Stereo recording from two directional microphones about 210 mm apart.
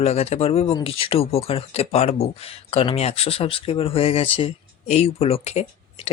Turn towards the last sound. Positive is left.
turn(degrees=30)  # may be behind; listen again after turning